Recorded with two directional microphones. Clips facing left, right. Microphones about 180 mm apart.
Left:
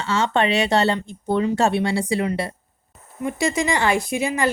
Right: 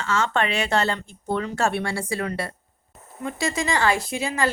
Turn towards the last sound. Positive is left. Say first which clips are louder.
# left 3 dB
turn(degrees=20)  # may be behind; listen again after turning